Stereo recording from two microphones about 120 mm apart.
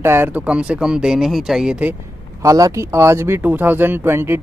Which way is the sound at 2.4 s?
30° right (ahead or behind).